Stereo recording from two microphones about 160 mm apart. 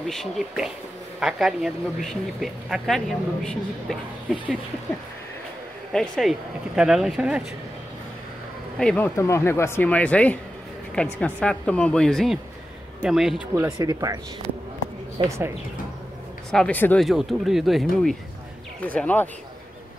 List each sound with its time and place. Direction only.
0.0 s speech: centre (ahead or behind)
5.9 s speech: centre (ahead or behind)
8.7 s speech: 10° left (ahead or behind)
13.6 s speech: 20° right (ahead or behind)
15.2 s speech: 20° right (ahead or behind)
16.4 s speech: 5° left (ahead or behind)
17.0 s speech: centre (ahead or behind)